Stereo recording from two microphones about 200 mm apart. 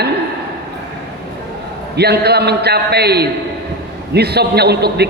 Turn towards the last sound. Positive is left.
turn(degrees=-55)  # may be behind; listen again after turning